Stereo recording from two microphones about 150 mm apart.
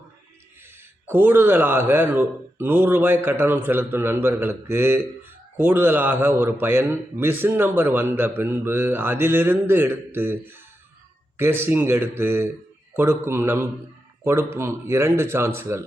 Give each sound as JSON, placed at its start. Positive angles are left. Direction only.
{"t": 1.0, "sound": "a man's voice", "side_deg": -15}